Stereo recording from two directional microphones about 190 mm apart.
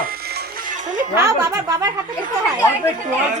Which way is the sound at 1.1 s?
20° right (ahead or behind).